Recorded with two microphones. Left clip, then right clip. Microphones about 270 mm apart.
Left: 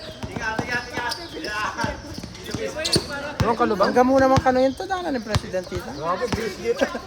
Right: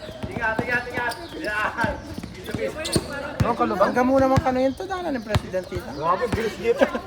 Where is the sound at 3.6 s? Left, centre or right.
Left.